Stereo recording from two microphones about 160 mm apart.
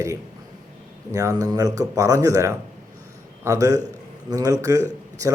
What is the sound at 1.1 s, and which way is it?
Speech, 20° right (ahead or behind).